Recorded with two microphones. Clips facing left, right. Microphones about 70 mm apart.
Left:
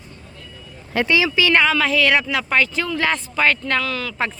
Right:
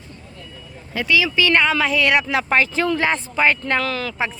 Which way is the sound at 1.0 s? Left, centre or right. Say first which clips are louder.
Left 5 dB; left.